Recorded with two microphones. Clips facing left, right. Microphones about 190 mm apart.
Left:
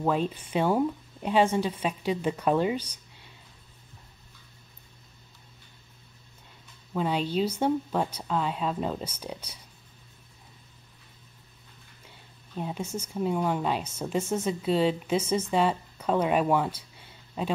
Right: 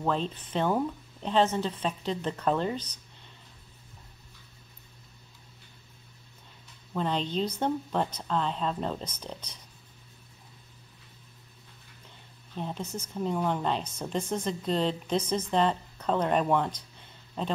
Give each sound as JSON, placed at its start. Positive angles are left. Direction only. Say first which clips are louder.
{"t": 0.0, "sound": "speech", "louder": "left 3 dB", "side_deg": 10}
{"t": 6.9, "sound": "speech", "louder": "left 2 dB", "side_deg": 5}
{"t": 12.5, "sound": "speech", "louder": "left 2 dB", "side_deg": 10}